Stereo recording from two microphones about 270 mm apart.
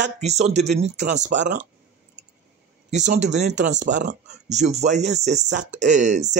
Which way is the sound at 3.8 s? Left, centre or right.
Right.